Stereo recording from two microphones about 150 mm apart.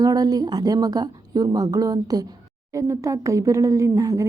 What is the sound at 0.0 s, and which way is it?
A woman's voice, 25° right (ahead or behind).